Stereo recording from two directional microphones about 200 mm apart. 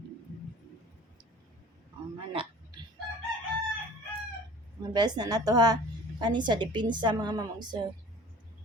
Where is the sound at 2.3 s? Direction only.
25° right (ahead or behind).